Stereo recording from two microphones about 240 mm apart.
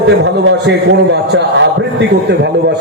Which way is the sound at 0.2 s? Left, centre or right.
Right.